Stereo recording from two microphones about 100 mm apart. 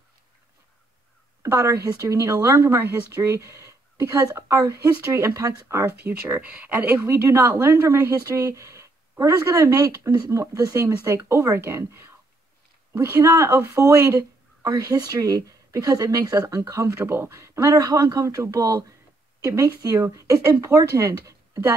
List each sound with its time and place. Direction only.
1.4 s speech: 30° right (ahead or behind)
17.7 s speech: 40° right (ahead or behind)